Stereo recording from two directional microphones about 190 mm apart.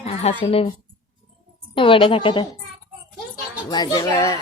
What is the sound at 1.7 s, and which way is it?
Speech, 25° left (ahead or behind).